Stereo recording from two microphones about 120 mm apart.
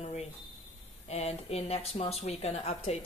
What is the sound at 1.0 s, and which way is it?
Speech, 60° left (ahead or behind).